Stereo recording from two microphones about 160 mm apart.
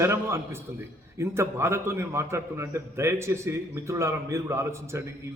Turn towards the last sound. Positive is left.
turn(degrees=-20)  # may be behind; listen again after turning